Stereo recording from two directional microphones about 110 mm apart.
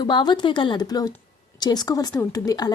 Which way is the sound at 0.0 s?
45° left (ahead or behind).